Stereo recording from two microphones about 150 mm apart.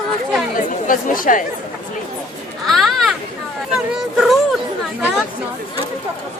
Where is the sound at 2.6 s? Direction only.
Centre (ahead or behind).